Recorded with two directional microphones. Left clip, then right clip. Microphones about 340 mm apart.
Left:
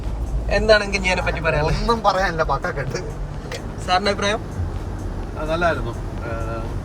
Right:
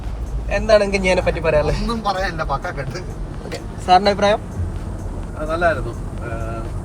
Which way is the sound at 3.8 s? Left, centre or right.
Centre.